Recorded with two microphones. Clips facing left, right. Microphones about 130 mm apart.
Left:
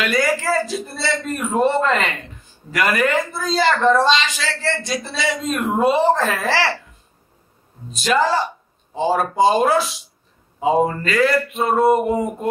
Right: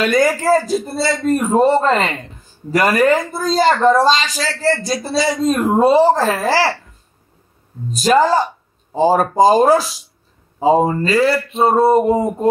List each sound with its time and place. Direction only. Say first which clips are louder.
0.0 s speech: right 5 dB; 40° right (ahead or behind)
7.9 s speech: right 5 dB; 40° right (ahead or behind)